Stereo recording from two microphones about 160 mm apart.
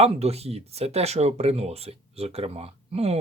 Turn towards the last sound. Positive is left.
turn(degrees=-40)  # may be behind; listen again after turning